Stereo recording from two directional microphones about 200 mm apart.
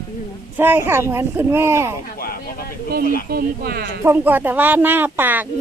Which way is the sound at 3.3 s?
50° right (ahead or behind).